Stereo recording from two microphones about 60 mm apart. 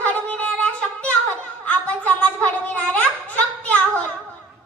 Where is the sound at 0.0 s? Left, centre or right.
Left.